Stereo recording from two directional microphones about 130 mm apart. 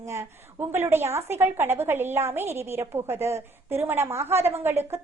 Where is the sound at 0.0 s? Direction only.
20° right (ahead or behind).